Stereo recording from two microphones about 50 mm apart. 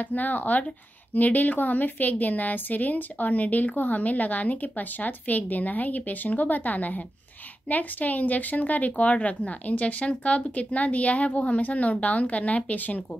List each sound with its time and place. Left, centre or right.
0.0 s a woman's voice: left